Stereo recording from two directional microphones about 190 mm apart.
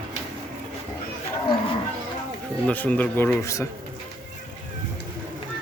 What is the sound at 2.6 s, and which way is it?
Speech, 5° left (ahead or behind).